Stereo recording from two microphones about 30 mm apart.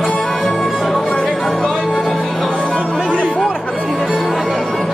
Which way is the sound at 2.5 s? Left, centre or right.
Left.